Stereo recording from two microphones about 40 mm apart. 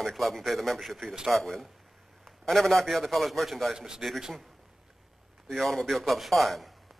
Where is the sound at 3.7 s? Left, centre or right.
Centre.